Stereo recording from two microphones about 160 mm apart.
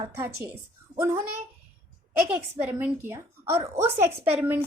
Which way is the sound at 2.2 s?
10° right (ahead or behind).